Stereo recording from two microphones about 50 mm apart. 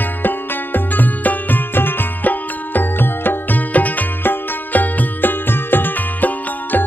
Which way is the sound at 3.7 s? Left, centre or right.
Left.